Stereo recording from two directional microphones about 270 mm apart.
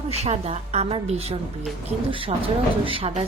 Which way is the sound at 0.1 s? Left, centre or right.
Right.